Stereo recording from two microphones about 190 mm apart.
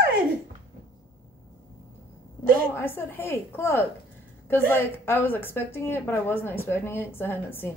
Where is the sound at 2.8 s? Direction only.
10° left (ahead or behind).